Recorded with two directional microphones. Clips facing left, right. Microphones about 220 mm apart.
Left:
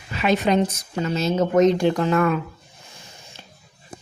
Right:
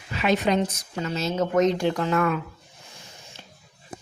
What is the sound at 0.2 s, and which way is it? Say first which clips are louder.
A woman's voice: left 3 dB; 35° left (ahead or behind).